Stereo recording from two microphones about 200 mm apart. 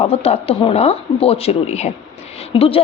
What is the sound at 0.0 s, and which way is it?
A woman's voice, 30° left (ahead or behind).